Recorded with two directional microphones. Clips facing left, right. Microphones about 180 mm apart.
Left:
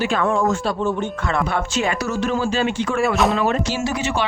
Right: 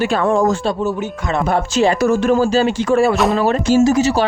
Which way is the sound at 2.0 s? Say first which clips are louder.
Right 8 dB; 50° right (ahead or behind).